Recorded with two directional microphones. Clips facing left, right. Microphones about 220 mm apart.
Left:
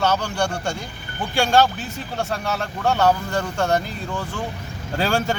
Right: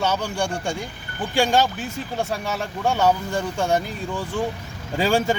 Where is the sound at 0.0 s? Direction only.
15° right (ahead or behind).